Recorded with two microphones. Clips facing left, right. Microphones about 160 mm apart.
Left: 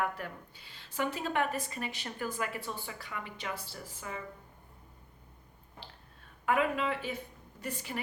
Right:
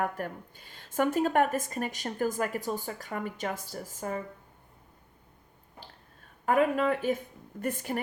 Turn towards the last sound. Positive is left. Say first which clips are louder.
# right 7 dB
turn(degrees=-50)  # may be behind; listen again after turning